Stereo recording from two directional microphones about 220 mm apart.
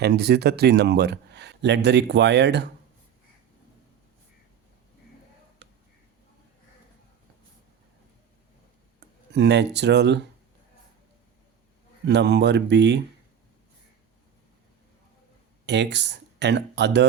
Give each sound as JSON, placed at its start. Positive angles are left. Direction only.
{"t": 0.0, "sound": "speech", "side_deg": -50}
{"t": 9.0, "sound": "speech", "side_deg": -50}
{"t": 12.0, "sound": "speech", "side_deg": -50}
{"t": 15.6, "sound": "speech", "side_deg": -50}